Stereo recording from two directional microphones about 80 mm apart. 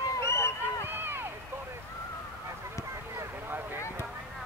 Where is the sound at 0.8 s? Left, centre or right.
Right.